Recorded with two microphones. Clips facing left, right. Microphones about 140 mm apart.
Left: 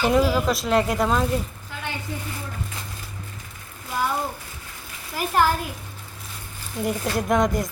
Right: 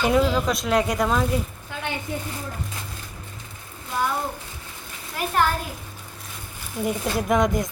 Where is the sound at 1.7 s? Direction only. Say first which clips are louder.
Right 3 dB; 20° right (ahead or behind).